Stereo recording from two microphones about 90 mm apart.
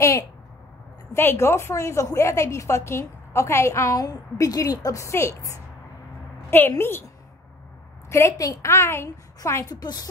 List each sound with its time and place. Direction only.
1.1 s a woman's voice: 25° left (ahead or behind)
6.8 s a woman's voice: 25° left (ahead or behind)
8.1 s a woman's voice: 35° left (ahead or behind)
9.8 s a woman's voice: 50° left (ahead or behind)